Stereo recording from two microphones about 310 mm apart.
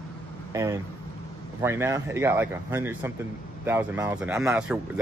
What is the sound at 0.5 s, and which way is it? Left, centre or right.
Speech, centre.